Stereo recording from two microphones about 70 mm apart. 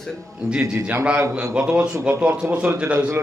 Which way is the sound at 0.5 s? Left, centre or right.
Centre.